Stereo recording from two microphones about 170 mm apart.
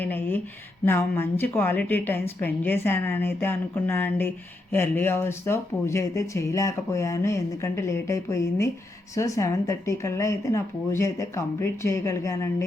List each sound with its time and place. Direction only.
0.0 s speech: 10° left (ahead or behind)